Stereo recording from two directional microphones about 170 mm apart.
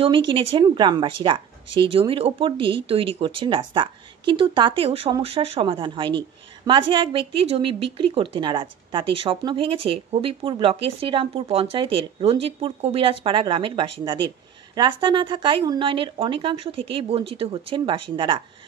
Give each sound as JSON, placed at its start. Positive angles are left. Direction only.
{"t": 0.0, "sound": "a woman's voice", "side_deg": -30}